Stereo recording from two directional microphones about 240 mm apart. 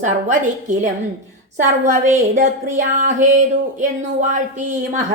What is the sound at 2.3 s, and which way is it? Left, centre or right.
A woman's voice, right.